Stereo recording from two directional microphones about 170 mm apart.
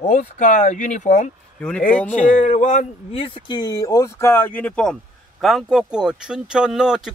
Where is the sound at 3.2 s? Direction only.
30° left (ahead or behind); by 7.1 s 5° right (ahead or behind).